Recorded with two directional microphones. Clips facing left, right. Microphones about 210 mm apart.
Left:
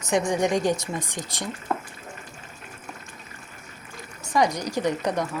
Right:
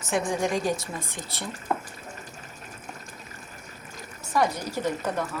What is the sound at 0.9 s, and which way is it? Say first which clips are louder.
Speech: left 4 dB; 15° left (ahead or behind).